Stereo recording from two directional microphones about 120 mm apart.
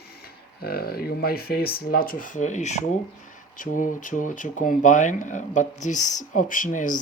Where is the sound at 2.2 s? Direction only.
90° left.